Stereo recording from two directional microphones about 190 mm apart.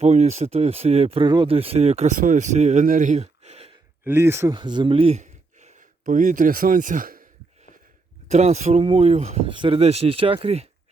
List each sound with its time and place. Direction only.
0.0 s speech: 35° right (ahead or behind)
4.0 s speech: 10° right (ahead or behind)
4.5 s speech: 25° right (ahead or behind); by 7.3 s 45° right (ahead or behind)
8.3 s speech: 35° right (ahead or behind)